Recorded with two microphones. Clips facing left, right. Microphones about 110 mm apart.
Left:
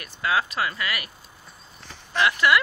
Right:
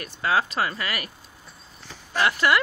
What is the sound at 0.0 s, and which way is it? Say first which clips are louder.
Speech: right 1 dB; 35° right (ahead or behind).